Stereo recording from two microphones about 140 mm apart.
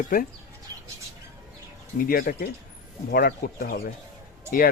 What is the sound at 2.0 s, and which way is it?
Speech, 90° left.